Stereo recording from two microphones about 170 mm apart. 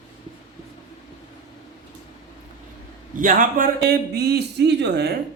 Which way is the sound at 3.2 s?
50° right (ahead or behind).